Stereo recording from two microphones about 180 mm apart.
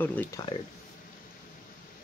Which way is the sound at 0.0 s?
10° left (ahead or behind).